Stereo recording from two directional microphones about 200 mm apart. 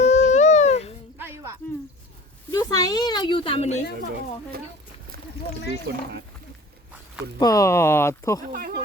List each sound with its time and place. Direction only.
0.0 s a sound: 35° left (ahead or behind)
2.5 s a woman's voice: 20° left (ahead or behind)
5.1 s a sound: 50° right (ahead or behind)
5.9 s speech: 55° right (ahead or behind)
7.3 s speech: 15° left (ahead or behind)
8.4 s speech: 45° right (ahead or behind)